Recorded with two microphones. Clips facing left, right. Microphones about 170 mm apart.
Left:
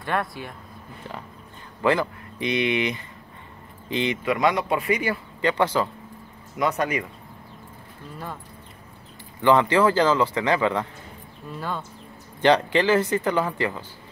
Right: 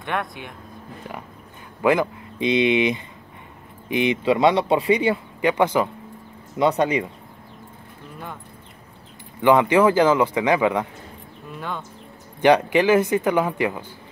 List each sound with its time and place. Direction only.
1.8 s speech: 15° right (ahead or behind)
6.5 s speech: 25° right (ahead or behind)
9.4 s speech: 15° right (ahead or behind)
12.4 s speech: 15° right (ahead or behind)